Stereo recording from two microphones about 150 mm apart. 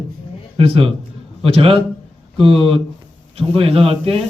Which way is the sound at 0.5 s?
40° right (ahead or behind).